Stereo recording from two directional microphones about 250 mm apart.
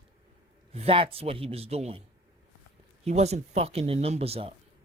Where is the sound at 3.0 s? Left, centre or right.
Right.